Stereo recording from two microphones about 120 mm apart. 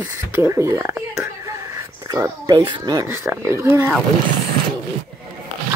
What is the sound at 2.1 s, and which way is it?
Speech, 25° right (ahead or behind).